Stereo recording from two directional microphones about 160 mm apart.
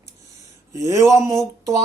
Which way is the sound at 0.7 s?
20° right (ahead or behind).